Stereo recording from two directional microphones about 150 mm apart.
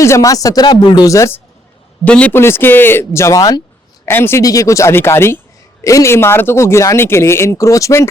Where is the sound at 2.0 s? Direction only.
10° left (ahead or behind).